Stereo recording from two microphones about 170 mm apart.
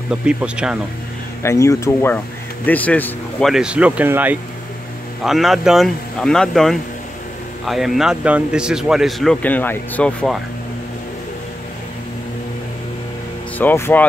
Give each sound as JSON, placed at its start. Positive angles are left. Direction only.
{"t": 0.1, "sound": "a man's voice", "side_deg": -5}
{"t": 1.4, "sound": "a man's voice", "side_deg": 15}
{"t": 13.6, "sound": "speech", "side_deg": 10}